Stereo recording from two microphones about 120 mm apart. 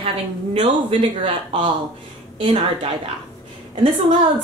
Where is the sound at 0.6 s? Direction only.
50° right (ahead or behind).